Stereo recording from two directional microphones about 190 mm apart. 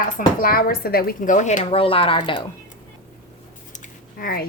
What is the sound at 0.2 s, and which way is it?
A woman's voice, 50° left (ahead or behind).